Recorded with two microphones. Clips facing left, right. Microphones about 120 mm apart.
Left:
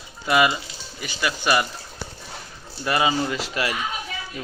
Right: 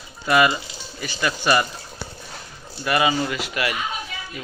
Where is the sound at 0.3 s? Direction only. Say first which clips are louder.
Right 1 dB; 15° left (ahead or behind).